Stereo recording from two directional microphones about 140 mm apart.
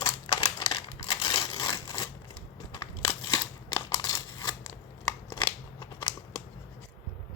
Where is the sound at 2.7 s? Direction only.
30° left (ahead or behind).